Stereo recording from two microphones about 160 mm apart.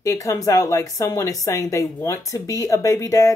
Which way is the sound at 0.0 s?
20° left (ahead or behind).